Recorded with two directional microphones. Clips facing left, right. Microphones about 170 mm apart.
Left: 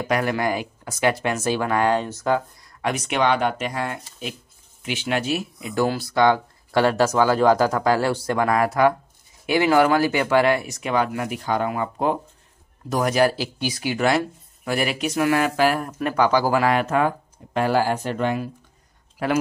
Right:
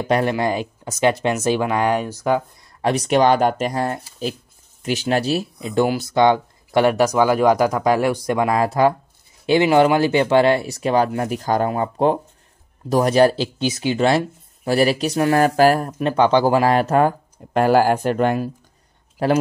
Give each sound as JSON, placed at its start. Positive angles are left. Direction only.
{"t": 0.0, "sound": "speech", "side_deg": -25}
{"t": 2.8, "sound": "speech", "side_deg": -35}
{"t": 15.9, "sound": "speech", "side_deg": -25}
{"t": 17.6, "sound": "speech", "side_deg": -50}
{"t": 19.2, "sound": "speech", "side_deg": -30}